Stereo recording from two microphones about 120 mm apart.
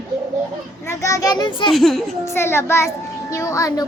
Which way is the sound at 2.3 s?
20° left (ahead or behind).